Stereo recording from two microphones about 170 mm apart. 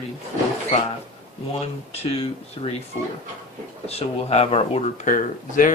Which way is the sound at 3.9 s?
40° left (ahead or behind).